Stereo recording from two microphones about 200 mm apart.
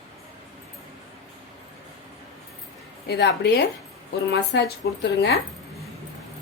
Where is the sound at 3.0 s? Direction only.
55° left (ahead or behind).